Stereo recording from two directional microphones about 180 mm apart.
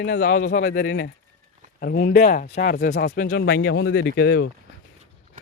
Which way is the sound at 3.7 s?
75° left (ahead or behind).